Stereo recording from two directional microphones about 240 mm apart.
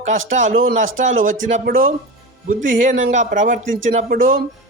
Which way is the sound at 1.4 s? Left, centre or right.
Right.